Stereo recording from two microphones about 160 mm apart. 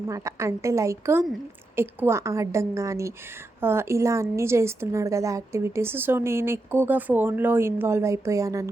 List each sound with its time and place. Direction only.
0.1 s a woman's voice: 20° right (ahead or behind)